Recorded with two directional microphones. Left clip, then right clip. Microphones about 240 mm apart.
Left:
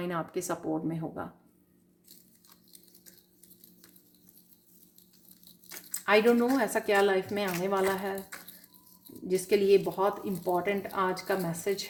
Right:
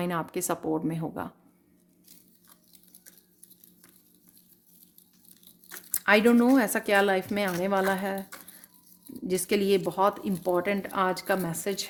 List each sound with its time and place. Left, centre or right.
0.0 s speech: right
5.9 s speech: right
9.2 s speech: right